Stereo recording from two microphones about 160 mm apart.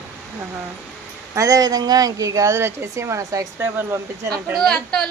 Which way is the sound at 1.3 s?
20° right (ahead or behind).